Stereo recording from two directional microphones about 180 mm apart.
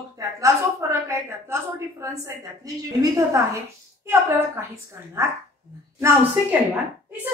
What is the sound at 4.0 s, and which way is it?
Speech, 15° right (ahead or behind).